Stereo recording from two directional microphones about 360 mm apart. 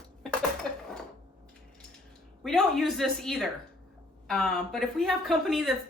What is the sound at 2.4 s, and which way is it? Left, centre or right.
A woman's voice, centre.